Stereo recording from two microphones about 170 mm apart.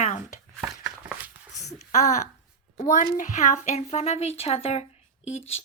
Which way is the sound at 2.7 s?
50° left (ahead or behind).